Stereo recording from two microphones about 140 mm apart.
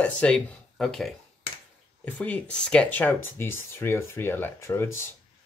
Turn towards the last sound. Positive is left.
turn(degrees=15)  # may be behind; listen again after turning